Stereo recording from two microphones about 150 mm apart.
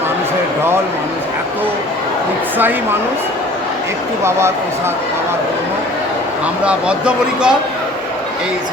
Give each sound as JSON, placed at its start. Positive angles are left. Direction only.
{"t": 4.2, "sound": "speech", "side_deg": -15}
{"t": 6.7, "sound": "speech", "side_deg": -5}